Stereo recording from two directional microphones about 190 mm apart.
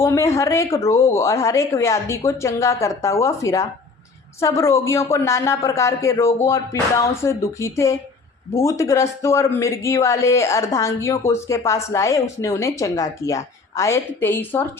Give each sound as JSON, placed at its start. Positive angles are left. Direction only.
{"t": 0.0, "sound": "speech", "side_deg": 15}